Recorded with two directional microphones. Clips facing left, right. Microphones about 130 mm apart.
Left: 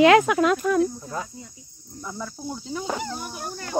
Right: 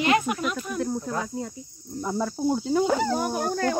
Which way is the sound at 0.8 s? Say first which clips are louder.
Left 3 dB; 65° right (ahead or behind).